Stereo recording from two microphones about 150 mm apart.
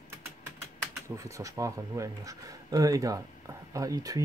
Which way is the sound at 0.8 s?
20° right (ahead or behind).